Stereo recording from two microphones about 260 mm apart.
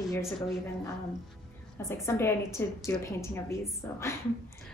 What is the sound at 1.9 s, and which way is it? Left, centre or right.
A woman's voice, centre.